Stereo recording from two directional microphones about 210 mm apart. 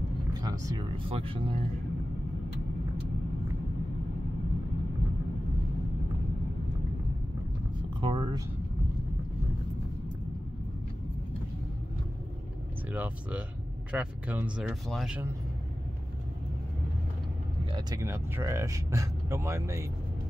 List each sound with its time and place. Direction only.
0.3 s speech: 20° right (ahead or behind)
8.0 s a sound: 20° right (ahead or behind)
12.9 s speech: 5° right (ahead or behind)
17.7 s speech: 15° right (ahead or behind)